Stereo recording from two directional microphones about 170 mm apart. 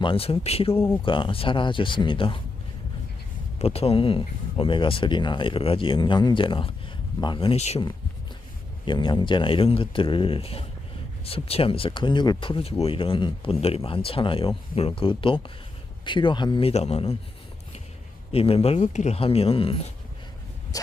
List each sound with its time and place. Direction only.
0.0 s speech: 30° left (ahead or behind)
3.6 s speech: 35° left (ahead or behind)
8.8 s speech: 30° left (ahead or behind)
18.3 s speech: 35° left (ahead or behind)